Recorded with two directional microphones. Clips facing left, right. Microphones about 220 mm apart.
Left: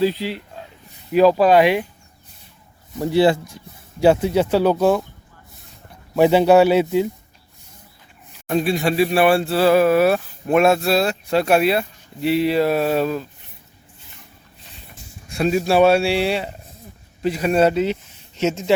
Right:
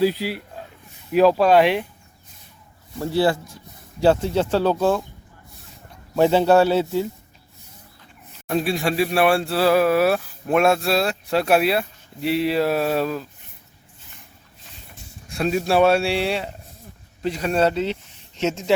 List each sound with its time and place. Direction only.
0.0 s speech: 10° right (ahead or behind)
3.0 s speech: 20° left (ahead or behind)
6.1 s speech: 15° left (ahead or behind)
8.4 s speech: centre (ahead or behind)
15.3 s speech: centre (ahead or behind)